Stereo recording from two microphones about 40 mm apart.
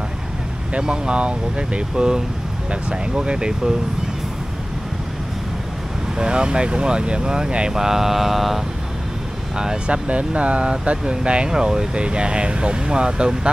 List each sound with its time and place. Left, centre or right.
0.7 s speech: right
6.1 s speech: right; by 8.6 s centre
9.8 s speech: right